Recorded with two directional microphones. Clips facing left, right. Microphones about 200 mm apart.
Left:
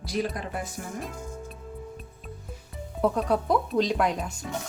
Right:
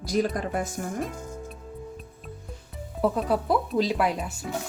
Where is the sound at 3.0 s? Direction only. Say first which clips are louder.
Even; centre (ahead or behind).